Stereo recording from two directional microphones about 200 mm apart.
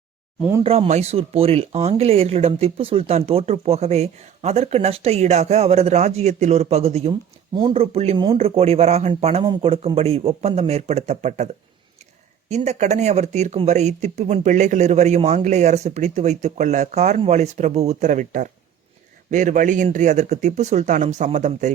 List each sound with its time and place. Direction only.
0.6 s speech: 30° right (ahead or behind)
12.5 s speech: 35° right (ahead or behind)